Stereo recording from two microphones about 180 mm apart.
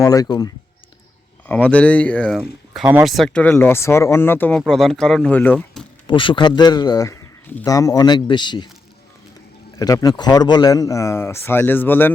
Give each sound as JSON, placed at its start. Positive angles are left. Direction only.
{"t": 0.0, "sound": "speech", "side_deg": 20}
{"t": 1.5, "sound": "speech", "side_deg": 5}
{"t": 6.1, "sound": "speech", "side_deg": 25}
{"t": 9.7, "sound": "speech", "side_deg": 20}